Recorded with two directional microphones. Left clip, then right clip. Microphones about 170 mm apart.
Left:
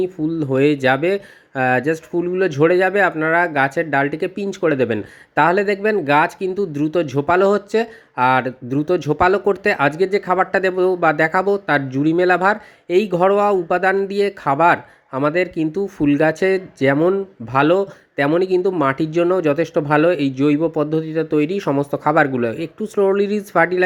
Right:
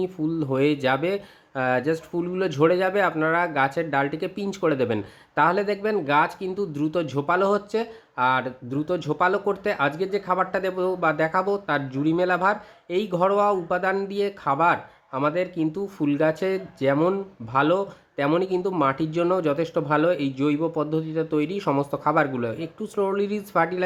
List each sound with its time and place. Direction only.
0.0 s speech: 10° left (ahead or behind)